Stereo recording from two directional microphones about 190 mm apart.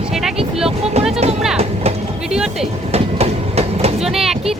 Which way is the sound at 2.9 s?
35° right (ahead or behind).